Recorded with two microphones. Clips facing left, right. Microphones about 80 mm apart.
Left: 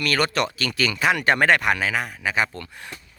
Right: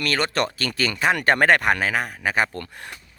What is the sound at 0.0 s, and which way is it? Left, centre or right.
Speech, right.